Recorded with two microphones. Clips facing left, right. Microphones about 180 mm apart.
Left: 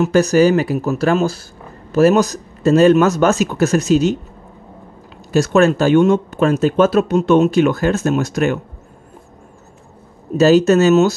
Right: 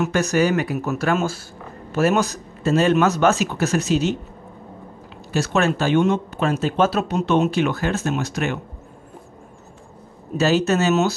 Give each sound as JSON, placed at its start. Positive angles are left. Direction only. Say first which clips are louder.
{"t": 0.0, "sound": "speech", "louder": "left 7 dB", "side_deg": 35}
{"t": 5.3, "sound": "speech", "louder": "left 7 dB", "side_deg": 45}
{"t": 10.3, "sound": "speech", "louder": "left 8 dB", "side_deg": 40}